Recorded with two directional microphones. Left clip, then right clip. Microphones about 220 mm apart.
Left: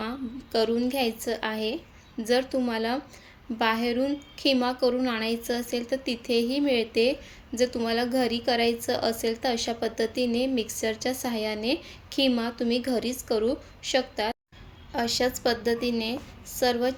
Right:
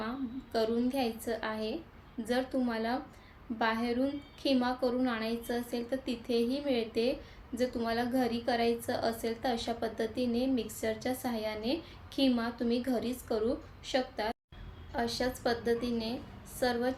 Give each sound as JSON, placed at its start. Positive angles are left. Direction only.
{"t": 0.5, "sound": "a woman's voice", "side_deg": 40}